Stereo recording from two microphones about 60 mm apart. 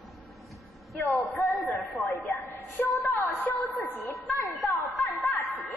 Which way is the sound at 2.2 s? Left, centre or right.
Left.